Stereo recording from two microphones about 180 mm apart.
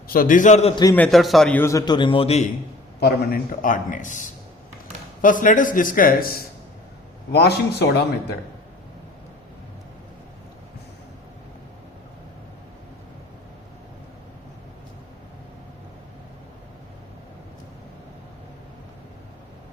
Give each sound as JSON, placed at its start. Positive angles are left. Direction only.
{"t": 0.1, "sound": "a man's voice", "side_deg": 50}
{"t": 0.9, "sound": "a man's voice", "side_deg": 5}
{"t": 3.0, "sound": "a man's voice", "side_deg": 55}
{"t": 7.3, "sound": "a man's voice", "side_deg": 65}